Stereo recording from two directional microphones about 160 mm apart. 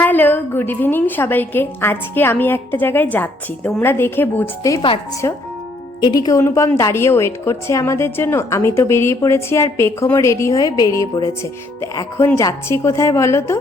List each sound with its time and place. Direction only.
0.0 s a woman's voice: 10° left (ahead or behind)